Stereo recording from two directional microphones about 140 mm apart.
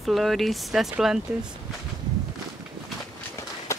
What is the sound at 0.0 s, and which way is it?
Speech, centre (ahead or behind).